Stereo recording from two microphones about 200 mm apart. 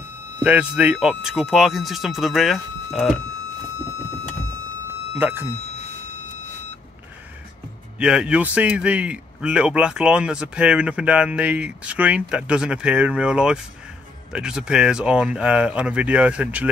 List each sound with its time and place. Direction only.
0.4 s a man's voice: 10° right (ahead or behind)
5.2 s speech: 10° right (ahead or behind)
8.0 s a man's voice: 5° right (ahead or behind)